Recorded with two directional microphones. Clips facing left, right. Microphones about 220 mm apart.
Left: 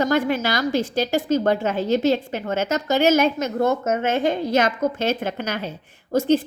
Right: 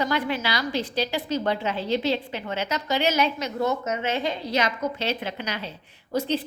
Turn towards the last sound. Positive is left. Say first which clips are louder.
# left 7 dB
turn(degrees=45)  # may be behind; listen again after turning